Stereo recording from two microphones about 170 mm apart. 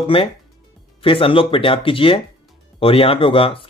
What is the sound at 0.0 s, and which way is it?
Speech, 30° left (ahead or behind).